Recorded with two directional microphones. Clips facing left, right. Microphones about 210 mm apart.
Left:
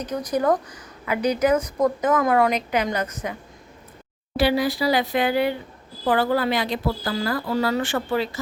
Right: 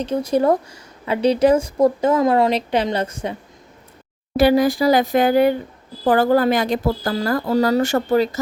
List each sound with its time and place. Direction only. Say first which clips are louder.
0.0 s speech: right 5 dB; 25° right (ahead or behind)
4.4 s speech: right 6 dB; 45° right (ahead or behind)